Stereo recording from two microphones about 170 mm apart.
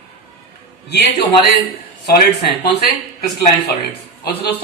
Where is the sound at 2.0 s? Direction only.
70° left (ahead or behind).